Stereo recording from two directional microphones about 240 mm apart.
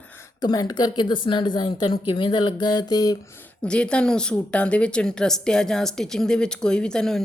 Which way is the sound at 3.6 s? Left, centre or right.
Centre.